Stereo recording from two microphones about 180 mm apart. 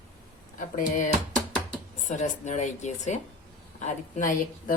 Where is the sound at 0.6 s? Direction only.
50° left (ahead or behind).